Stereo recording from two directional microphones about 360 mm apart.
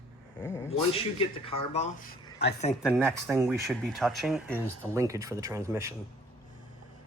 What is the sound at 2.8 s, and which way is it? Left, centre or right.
Speech, centre.